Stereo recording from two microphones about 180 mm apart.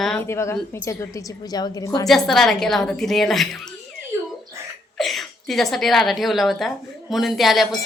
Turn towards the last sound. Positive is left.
turn(degrees=0)  # may be behind; listen again after turning